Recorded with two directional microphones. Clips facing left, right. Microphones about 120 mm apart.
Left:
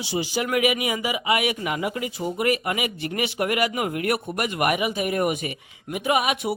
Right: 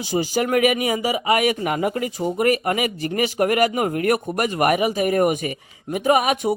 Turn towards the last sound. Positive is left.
turn(degrees=-40)  # may be behind; listen again after turning